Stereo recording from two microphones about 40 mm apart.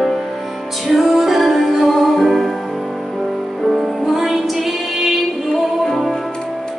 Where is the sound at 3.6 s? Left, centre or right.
Centre.